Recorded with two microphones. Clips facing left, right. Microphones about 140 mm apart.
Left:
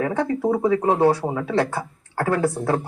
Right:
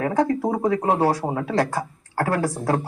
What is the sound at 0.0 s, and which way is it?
Speech, 40° right (ahead or behind).